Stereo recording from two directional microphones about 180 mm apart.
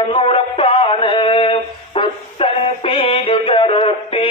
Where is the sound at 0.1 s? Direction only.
30° left (ahead or behind).